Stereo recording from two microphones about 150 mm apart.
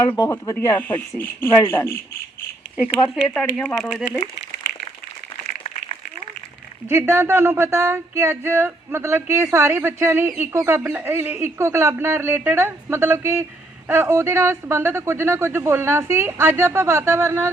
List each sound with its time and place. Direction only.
0.2 s speech: 25° left (ahead or behind)
3.2 s speech: 5° left (ahead or behind)
6.8 s a woman's voice: 15° right (ahead or behind)